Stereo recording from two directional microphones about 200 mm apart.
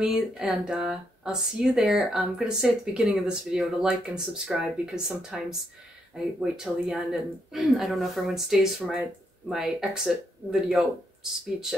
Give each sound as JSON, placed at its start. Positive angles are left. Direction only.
{"t": 0.0, "sound": "speech", "side_deg": -5}
{"t": 6.4, "sound": "speech", "side_deg": -5}